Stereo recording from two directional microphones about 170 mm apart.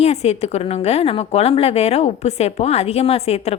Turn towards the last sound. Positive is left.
turn(degrees=40)  # may be behind; listen again after turning